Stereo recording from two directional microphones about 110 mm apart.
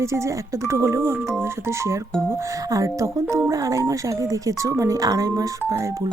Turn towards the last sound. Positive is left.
turn(degrees=-35)  # may be behind; listen again after turning